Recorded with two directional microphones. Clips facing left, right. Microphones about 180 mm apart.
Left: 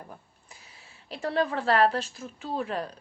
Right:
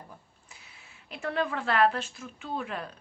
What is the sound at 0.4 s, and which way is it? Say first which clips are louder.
A woman's voice: left 2 dB; 35° left (ahead or behind).